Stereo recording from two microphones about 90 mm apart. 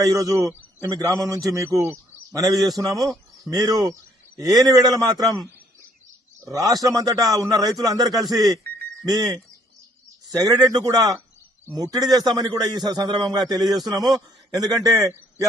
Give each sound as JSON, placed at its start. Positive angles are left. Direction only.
{"t": 0.0, "sound": "a man's voice", "side_deg": -40}
{"t": 2.3, "sound": "a man's voice", "side_deg": -40}
{"t": 6.4, "sound": "a man's voice", "side_deg": -40}